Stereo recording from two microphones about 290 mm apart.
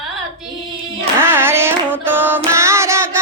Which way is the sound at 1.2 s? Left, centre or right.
Centre.